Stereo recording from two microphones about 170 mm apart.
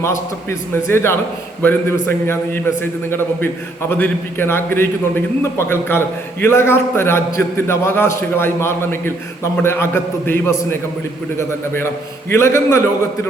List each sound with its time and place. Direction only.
0.0 s a man's voice: 15° left (ahead or behind)